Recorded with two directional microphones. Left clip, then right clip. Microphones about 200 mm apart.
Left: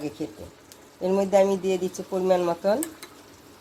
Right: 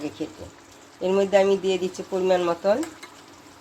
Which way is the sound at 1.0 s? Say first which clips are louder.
Right 1 dB; centre (ahead or behind).